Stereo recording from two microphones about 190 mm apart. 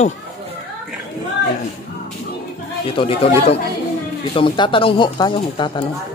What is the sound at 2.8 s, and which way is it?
Speech, 30° left (ahead or behind).